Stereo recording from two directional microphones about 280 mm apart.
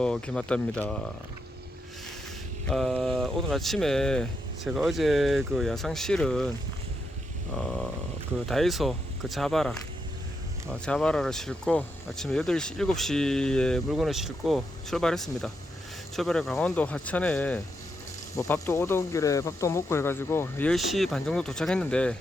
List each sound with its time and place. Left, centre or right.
0.0 s speech: centre
2.6 s speech: centre
7.5 s a sound: centre
8.4 s speech: centre
10.8 s speech: centre